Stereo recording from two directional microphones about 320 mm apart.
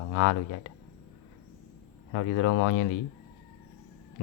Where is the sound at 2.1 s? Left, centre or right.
Left.